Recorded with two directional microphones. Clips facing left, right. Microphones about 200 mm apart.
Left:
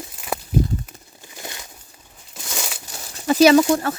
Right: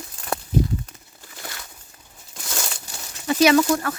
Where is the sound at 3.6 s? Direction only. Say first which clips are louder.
Left 3 dB; 30° left (ahead or behind).